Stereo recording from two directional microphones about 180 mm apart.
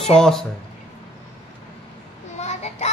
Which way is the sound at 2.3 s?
40° left (ahead or behind).